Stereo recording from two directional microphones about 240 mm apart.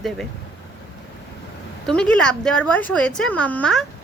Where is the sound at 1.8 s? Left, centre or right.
Centre.